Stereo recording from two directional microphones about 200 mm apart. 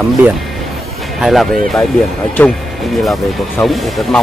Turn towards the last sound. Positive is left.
turn(degrees=0)  # may be behind; listen again after turning